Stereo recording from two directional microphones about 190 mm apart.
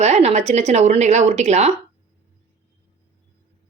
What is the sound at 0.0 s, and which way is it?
Speech, 35° right (ahead or behind).